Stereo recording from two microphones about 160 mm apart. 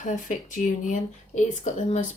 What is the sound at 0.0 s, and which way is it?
Speech, 50° left (ahead or behind).